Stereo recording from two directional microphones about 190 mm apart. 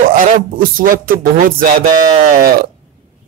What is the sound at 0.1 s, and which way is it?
Speech, 50° right (ahead or behind).